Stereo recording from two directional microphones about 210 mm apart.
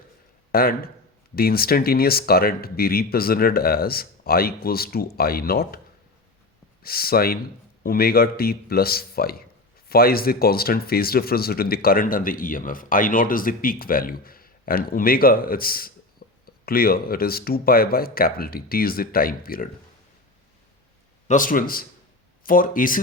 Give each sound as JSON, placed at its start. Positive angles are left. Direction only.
{"t": 0.5, "sound": "speech", "side_deg": 45}
{"t": 6.8, "sound": "speech", "side_deg": 45}
{"t": 16.2, "sound": "a sound", "side_deg": 45}
{"t": 16.6, "sound": "speech", "side_deg": 45}
{"t": 21.2, "sound": "a man's voice", "side_deg": 40}